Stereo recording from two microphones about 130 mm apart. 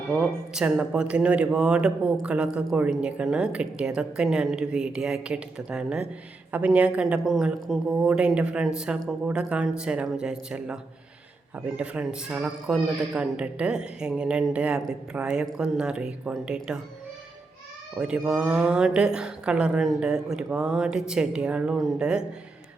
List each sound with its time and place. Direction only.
0.1 s speech: 5° right (ahead or behind)
17.9 s speech: 5° right (ahead or behind)